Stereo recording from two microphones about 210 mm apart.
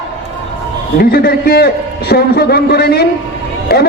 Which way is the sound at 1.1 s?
45° left (ahead or behind).